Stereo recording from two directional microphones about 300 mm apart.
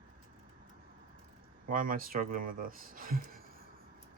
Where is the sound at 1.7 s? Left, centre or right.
Right.